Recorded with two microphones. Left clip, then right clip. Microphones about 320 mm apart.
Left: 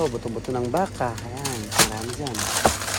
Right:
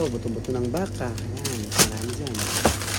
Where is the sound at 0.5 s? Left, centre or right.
Centre.